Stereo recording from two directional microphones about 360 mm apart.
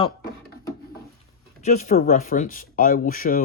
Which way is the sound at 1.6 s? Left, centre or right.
Centre.